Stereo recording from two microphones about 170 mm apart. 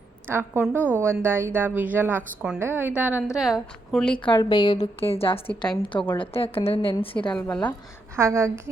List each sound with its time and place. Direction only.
0.3 s a woman's voice: 15° right (ahead or behind); by 4.2 s 5° left (ahead or behind)
4.2 s a woman's voice: 30° left (ahead or behind)
5.5 s a woman's voice: 10° left (ahead or behind)
6.1 s a woman's voice: 35° left (ahead or behind)
7.2 s a woman's voice: 5° left (ahead or behind)
8.1 s a woman's voice: 15° right (ahead or behind)